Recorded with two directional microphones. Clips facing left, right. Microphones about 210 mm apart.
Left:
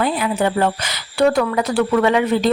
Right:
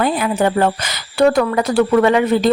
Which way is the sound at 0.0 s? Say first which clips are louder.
Right 2 dB; 45° right (ahead or behind).